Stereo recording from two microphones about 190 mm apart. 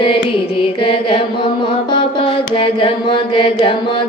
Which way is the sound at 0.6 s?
30° left (ahead or behind).